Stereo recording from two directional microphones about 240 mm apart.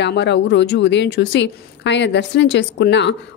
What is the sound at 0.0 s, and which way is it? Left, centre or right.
A woman's voice, left.